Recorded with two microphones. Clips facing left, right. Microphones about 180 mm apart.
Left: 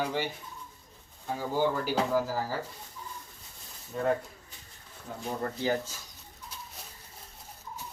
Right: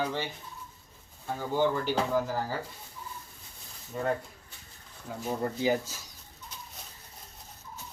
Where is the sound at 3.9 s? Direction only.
Centre (ahead or behind).